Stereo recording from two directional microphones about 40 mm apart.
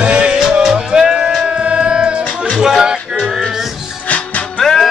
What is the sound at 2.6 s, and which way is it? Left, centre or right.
Music, centre.